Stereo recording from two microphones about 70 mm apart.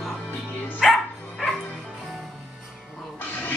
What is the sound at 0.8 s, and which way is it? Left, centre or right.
Dog, centre.